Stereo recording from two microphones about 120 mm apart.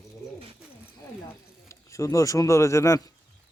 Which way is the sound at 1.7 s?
25° left (ahead or behind).